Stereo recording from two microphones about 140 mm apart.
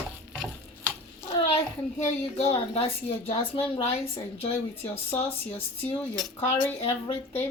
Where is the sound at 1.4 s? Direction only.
45° left (ahead or behind).